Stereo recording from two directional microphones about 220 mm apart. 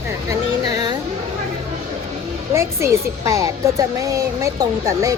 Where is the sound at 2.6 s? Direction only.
10° right (ahead or behind).